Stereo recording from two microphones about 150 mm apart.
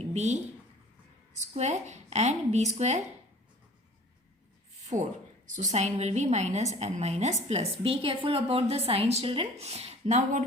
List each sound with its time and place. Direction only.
0.1 s speech: 50° right (ahead or behind)
1.4 s a woman's voice: 50° right (ahead or behind)
4.9 s a woman's voice: 50° right (ahead or behind)